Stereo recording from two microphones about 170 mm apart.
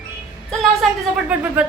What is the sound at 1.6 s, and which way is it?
Speech, 10° right (ahead or behind).